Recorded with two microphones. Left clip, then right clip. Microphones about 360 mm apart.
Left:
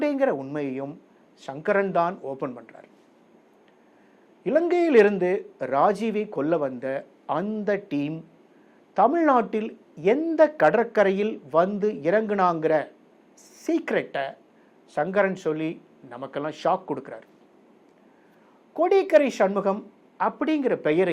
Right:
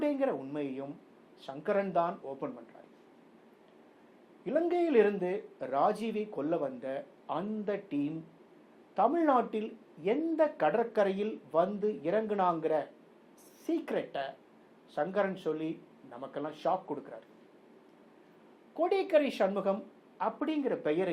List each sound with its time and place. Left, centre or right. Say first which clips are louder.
0.0 s a woman's voice: left 8 dB; left
4.4 s a man's voice: left 8 dB; left
18.8 s speech: left 9 dB; left
20.1 s a woman's voice: left 9 dB; left